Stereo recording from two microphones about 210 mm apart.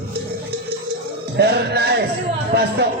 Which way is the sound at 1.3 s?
50° right (ahead or behind).